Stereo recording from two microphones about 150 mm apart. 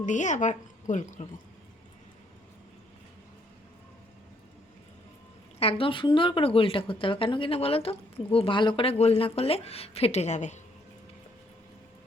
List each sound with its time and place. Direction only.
0.0 s a woman's voice: 55° left (ahead or behind)
5.5 s speech: 40° left (ahead or behind)